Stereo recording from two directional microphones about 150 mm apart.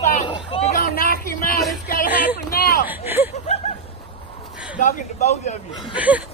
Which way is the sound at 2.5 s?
90° left.